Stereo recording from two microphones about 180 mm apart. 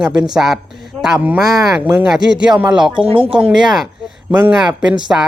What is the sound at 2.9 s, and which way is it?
Speech, 30° right (ahead or behind).